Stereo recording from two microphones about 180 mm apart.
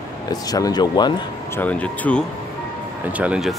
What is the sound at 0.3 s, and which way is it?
Speech, 20° left (ahead or behind).